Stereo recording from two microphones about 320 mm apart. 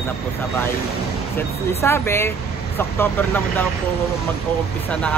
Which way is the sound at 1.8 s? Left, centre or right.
Centre.